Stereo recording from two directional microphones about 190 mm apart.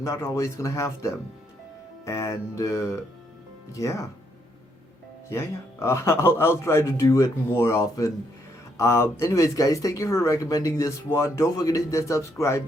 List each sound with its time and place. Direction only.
0.0 s speech: 15° left (ahead or behind)
5.8 s speech: 15° left (ahead or behind)